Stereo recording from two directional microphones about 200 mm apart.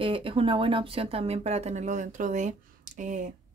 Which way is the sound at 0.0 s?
25° right (ahead or behind).